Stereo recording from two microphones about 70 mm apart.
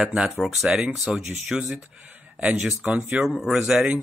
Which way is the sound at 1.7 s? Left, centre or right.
Centre.